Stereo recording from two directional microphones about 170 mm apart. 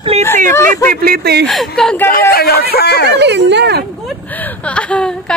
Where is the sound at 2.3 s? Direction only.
65° left (ahead or behind).